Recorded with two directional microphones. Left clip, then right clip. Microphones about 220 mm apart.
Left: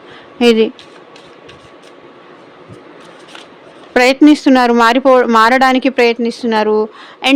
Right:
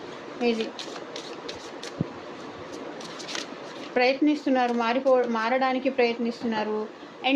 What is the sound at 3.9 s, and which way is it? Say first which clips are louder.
Speech: left 14 dB; 55° left (ahead or behind).